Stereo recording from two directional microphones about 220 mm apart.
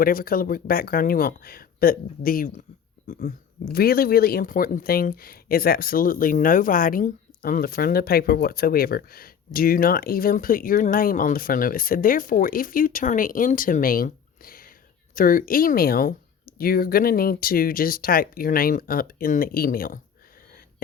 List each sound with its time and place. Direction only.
0.0 s speech: 40° left (ahead or behind)